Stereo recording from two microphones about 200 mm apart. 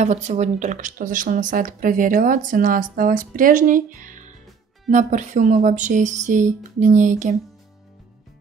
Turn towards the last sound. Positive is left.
turn(degrees=-40)  # may be behind; listen again after turning